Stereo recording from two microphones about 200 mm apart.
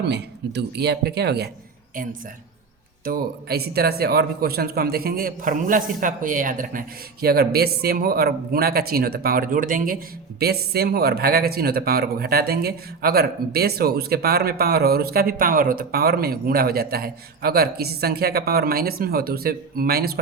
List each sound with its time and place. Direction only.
0.1 s speech: 55° right (ahead or behind)
3.0 s a man's voice: 50° right (ahead or behind)